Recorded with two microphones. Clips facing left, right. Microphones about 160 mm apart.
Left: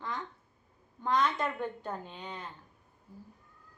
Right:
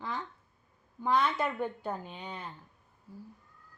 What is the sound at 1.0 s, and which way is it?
A child's voice, 10° right (ahead or behind).